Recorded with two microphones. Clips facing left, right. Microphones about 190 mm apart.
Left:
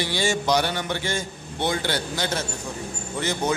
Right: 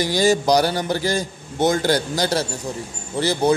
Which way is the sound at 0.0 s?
40° right (ahead or behind).